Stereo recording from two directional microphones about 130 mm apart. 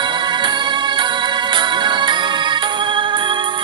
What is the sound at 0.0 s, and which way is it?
Music, 35° right (ahead or behind).